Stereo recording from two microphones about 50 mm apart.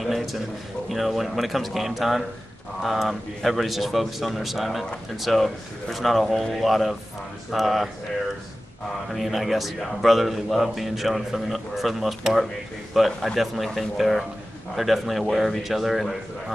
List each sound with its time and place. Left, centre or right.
0.0 s a sound: centre
0.8 s speech: centre
9.1 s speech: centre